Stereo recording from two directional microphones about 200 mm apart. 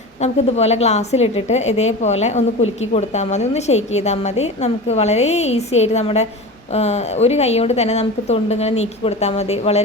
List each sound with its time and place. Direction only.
0.2 s speech: 35° left (ahead or behind)